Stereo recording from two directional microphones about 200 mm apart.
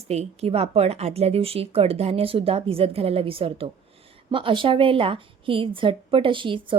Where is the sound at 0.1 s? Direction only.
30° right (ahead or behind).